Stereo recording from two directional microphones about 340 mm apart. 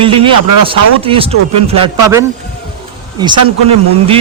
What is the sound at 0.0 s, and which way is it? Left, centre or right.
Speech, centre.